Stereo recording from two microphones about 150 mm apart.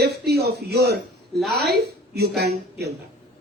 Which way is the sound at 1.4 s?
Centre (ahead or behind).